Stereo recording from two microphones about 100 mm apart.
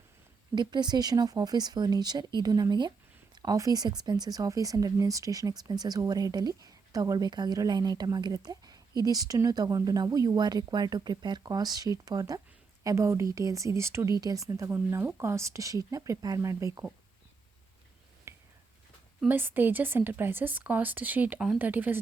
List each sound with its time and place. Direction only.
0.5 s speech: 45° right (ahead or behind)
18.3 s a sound: 30° right (ahead or behind)
19.3 s a woman's voice: 20° right (ahead or behind)